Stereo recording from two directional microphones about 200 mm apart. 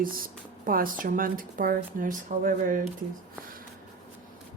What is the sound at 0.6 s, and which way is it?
Speech, 45° right (ahead or behind).